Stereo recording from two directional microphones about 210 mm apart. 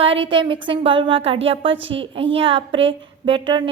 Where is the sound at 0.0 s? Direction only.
25° right (ahead or behind).